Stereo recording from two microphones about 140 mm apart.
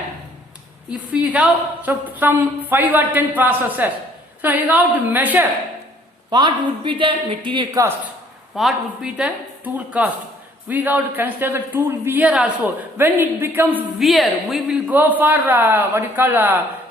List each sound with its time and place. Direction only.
0.9 s a man's voice: 10° right (ahead or behind)
6.3 s a woman's voice: 35° right (ahead or behind)
8.5 s a man's voice: centre (ahead or behind)
14.0 s a man's voice: centre (ahead or behind)